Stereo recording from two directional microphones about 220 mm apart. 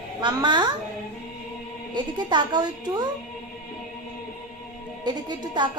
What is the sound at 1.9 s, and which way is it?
A woman's voice, 20° right (ahead or behind).